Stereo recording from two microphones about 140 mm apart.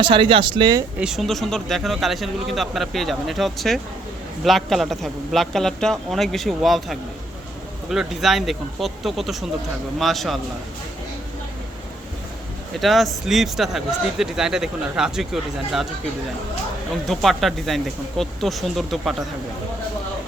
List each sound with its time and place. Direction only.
0.0 s speech: 35° right (ahead or behind)
0.9 s speech: 5° right (ahead or behind)
12.8 s speech: centre (ahead or behind)
17.1 s speech: centre (ahead or behind)